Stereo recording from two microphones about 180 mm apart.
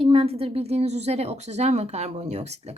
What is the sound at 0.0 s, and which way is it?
A woman's voice, 30° right (ahead or behind).